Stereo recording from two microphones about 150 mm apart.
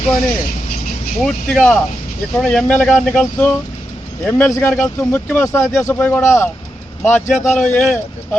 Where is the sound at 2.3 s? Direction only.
5° left (ahead or behind).